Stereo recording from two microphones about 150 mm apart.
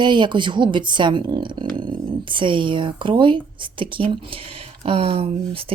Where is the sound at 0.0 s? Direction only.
30° right (ahead or behind).